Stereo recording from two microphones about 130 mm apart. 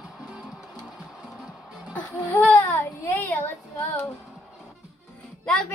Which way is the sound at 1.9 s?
10° left (ahead or behind).